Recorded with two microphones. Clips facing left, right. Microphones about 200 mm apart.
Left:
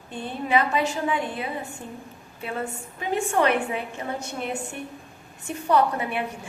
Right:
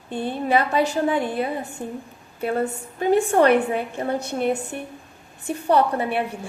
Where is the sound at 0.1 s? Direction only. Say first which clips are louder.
Right 3 dB; 35° right (ahead or behind).